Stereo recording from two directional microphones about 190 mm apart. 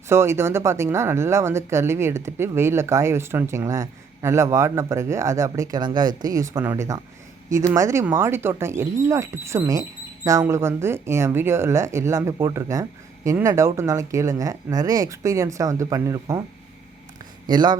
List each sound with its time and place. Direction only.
0.1 s speech: 15° right (ahead or behind)
17.4 s speech: 20° right (ahead or behind)